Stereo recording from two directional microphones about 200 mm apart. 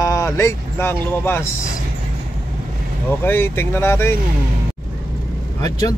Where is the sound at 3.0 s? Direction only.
10° left (ahead or behind).